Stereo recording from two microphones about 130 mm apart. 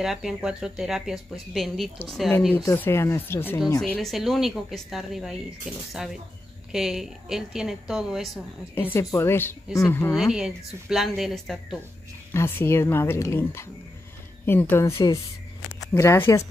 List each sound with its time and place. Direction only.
0.0 s speech: 5° right (ahead or behind)
2.6 s speech: 20° left (ahead or behind)
3.8 s speech: 5° left (ahead or behind)
8.7 s a woman's voice: 20° left (ahead or behind)
10.1 s speech: 5° right (ahead or behind)
12.3 s a woman's voice: 15° left (ahead or behind)